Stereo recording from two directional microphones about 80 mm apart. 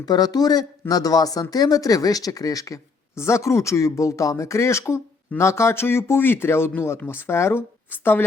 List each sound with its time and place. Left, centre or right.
0.0 s speech: left